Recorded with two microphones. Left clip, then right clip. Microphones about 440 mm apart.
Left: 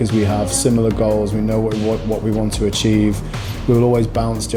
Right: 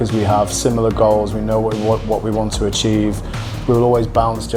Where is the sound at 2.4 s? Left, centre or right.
Right.